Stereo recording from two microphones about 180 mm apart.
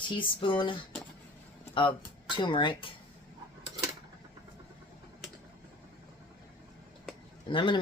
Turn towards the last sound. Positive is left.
turn(degrees=25)  # may be behind; listen again after turning